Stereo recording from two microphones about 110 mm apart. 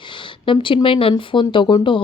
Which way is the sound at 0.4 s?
50° left (ahead or behind).